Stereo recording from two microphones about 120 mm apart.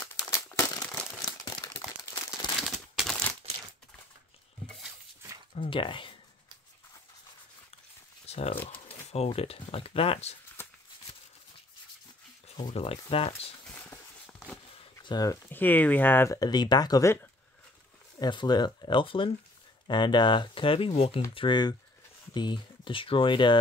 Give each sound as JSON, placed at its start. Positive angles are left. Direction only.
{"t": 0.1, "sound": "crumpling", "side_deg": 30}
{"t": 1.2, "sound": "a sound", "side_deg": 30}
{"t": 2.5, "sound": "a sound", "side_deg": 0}
{"t": 5.5, "sound": "speech", "side_deg": 50}
{"t": 8.3, "sound": "speech", "side_deg": 60}
{"t": 10.6, "sound": "a sound", "side_deg": 20}
{"t": 12.7, "sound": "speech", "side_deg": 55}
{"t": 15.5, "sound": "speech", "side_deg": 15}
{"t": 16.3, "sound": "speech", "side_deg": 35}
{"t": 18.2, "sound": "speech", "side_deg": 40}
{"t": 21.4, "sound": "speech", "side_deg": 40}